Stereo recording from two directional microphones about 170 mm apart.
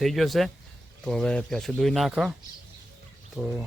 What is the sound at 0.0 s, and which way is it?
Speech, centre (ahead or behind).